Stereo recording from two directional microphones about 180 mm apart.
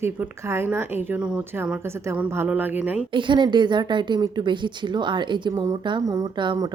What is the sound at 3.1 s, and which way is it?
Speech, 25° right (ahead or behind).